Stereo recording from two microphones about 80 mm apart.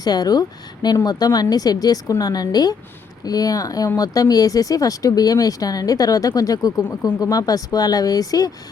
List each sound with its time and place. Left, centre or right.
0.0 s speech: left